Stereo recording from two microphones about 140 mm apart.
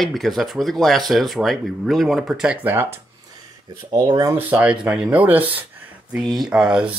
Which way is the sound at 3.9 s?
25° right (ahead or behind).